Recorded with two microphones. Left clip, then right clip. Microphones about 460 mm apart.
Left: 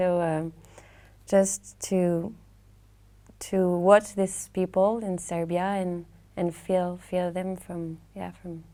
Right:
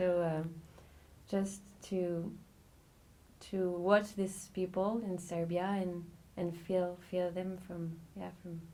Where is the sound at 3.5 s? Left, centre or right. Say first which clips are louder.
Left 11 dB; left.